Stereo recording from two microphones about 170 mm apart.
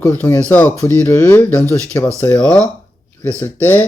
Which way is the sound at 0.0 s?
10° left (ahead or behind).